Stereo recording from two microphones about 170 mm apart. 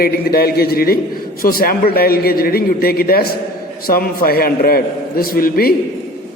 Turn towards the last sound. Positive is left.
turn(degrees=60)  # may be behind; listen again after turning